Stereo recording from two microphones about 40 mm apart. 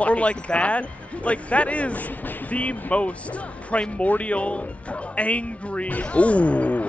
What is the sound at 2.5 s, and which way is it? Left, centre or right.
Speech, left.